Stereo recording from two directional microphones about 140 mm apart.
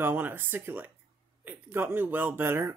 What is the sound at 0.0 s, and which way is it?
Speech, 15° right (ahead or behind).